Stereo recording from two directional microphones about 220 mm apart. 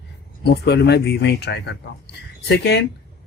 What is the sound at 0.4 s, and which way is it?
Speech, 50° left (ahead or behind).